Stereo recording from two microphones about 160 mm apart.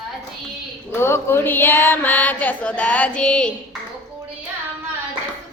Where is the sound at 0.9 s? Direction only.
15° left (ahead or behind).